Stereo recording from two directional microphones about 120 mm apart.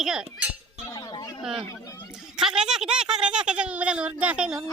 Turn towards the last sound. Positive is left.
turn(degrees=-10)  # may be behind; listen again after turning